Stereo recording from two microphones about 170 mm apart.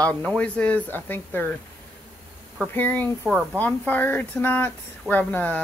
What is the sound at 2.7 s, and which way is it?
Speech, 10° left (ahead or behind).